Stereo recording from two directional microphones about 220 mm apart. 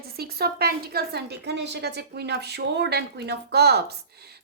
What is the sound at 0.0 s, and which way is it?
A woman's voice, 45° right (ahead or behind).